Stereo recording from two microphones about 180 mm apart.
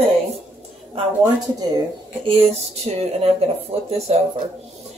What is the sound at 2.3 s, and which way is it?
Speech, 35° right (ahead or behind).